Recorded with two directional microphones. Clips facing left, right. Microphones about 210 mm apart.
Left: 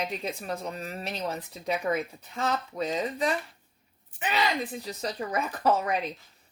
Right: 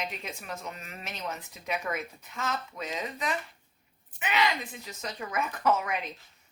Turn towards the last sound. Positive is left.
turn(degrees=35)  # may be behind; listen again after turning